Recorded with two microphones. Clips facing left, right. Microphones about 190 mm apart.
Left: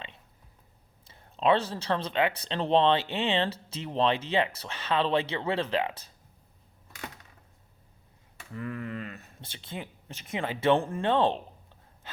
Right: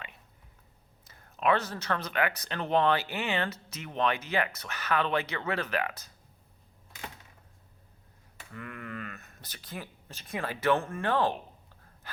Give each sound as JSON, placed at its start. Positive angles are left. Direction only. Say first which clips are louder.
{"t": 1.0, "sound": "speech", "louder": "left 3 dB", "side_deg": 25}
{"t": 8.5, "sound": "speech", "louder": "left 5 dB", "side_deg": 30}
{"t": 12.0, "sound": "a sound", "louder": "even", "side_deg": 25}